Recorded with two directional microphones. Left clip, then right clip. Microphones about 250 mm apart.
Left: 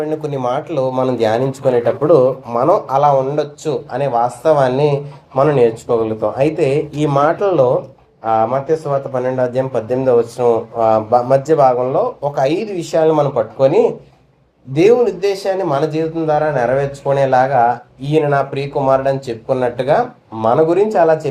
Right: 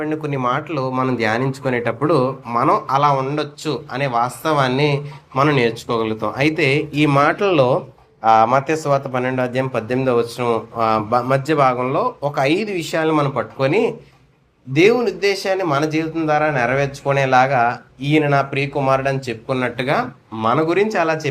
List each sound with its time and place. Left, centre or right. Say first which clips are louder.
0.0 s speech: left 2 dB; right
1.8 s speech: left 5 dB; right
2.6 s speech: left 3 dB; right